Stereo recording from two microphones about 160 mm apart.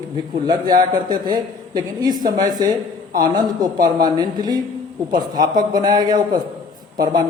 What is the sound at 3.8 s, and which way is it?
A man's voice, 25° right (ahead or behind).